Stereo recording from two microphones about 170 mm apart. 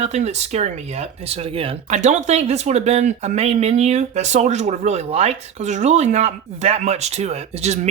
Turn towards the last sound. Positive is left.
turn(degrees=-40)  # may be behind; listen again after turning